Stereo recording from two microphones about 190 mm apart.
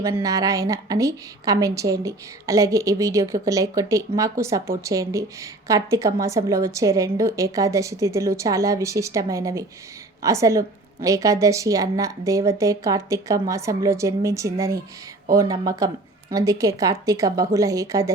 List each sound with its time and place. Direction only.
0.0 s speech: 15° right (ahead or behind)